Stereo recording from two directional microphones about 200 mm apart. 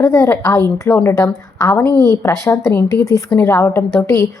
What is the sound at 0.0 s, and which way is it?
A woman's voice, 15° left (ahead or behind).